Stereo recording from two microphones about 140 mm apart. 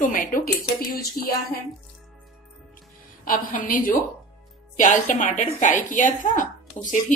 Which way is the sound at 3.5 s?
75° left (ahead or behind).